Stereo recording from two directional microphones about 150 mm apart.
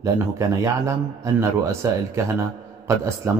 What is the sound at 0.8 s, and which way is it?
A man's voice, 20° right (ahead or behind).